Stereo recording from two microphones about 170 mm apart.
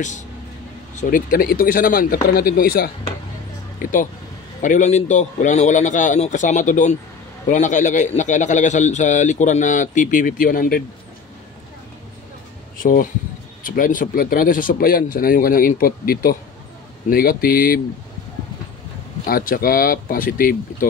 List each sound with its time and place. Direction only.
1.1 s speech: 55° left (ahead or behind)
3.8 s a man's voice: 50° left (ahead or behind)
12.7 s speech: 55° left (ahead or behind)
19.2 s speech: 60° left (ahead or behind)